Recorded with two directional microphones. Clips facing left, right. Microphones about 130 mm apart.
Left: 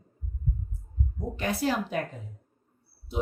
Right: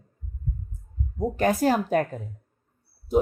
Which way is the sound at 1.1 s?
45° right (ahead or behind).